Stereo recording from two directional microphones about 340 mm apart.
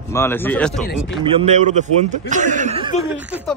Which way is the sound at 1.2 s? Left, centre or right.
Centre.